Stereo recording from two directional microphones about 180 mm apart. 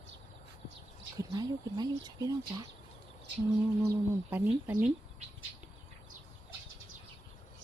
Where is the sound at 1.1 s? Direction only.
20° right (ahead or behind).